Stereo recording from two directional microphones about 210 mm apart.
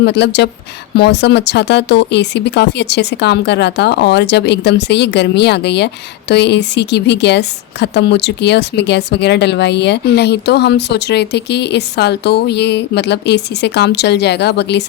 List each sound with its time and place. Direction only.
0.0 s speech: 55° left (ahead or behind)